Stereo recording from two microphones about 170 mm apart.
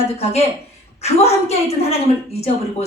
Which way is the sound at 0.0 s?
40° left (ahead or behind).